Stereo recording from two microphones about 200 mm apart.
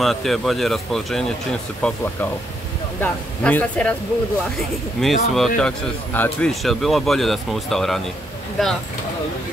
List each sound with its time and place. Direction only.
0.0 s speech: centre (ahead or behind)
3.0 s speech: 10° left (ahead or behind)
5.0 s speech: centre (ahead or behind)